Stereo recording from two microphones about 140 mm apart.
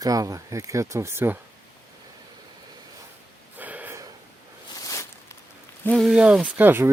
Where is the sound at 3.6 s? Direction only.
10° right (ahead or behind).